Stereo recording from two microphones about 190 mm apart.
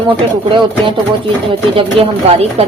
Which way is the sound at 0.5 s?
25° right (ahead or behind).